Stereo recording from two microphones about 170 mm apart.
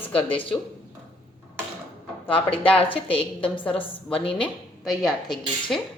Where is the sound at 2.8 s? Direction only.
30° left (ahead or behind).